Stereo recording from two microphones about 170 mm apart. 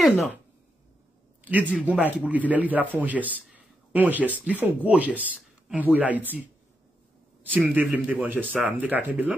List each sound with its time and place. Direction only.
0.0 s speech: centre (ahead or behind)
1.4 s a man's voice: 10° right (ahead or behind)
7.6 s speech: 10° right (ahead or behind)